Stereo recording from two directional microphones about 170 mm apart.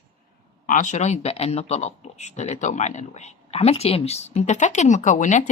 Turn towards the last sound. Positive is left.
turn(degrees=45)  # may be behind; listen again after turning